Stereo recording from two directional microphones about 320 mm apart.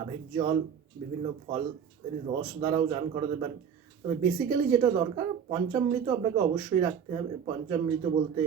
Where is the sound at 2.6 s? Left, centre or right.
Centre.